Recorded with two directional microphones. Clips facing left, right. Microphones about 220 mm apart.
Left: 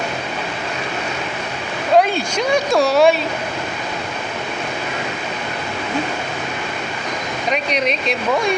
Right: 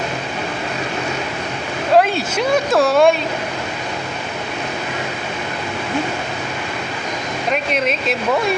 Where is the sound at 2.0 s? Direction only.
Centre (ahead or behind).